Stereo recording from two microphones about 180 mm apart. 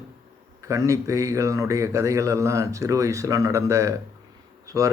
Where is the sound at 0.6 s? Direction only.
15° right (ahead or behind).